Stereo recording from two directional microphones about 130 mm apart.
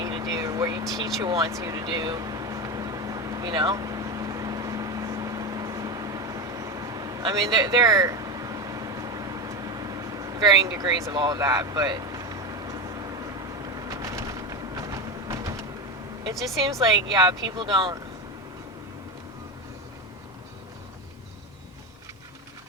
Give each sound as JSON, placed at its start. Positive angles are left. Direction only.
{"t": 0.0, "sound": "vehicle", "side_deg": -30}
{"t": 13.7, "sound": "a sound", "side_deg": -25}
{"t": 16.7, "sound": "speech", "side_deg": -30}